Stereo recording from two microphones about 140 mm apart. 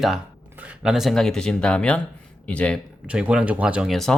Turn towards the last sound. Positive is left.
turn(degrees=0)  # may be behind; listen again after turning